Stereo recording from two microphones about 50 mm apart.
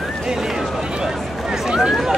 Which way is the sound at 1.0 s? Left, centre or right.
Centre.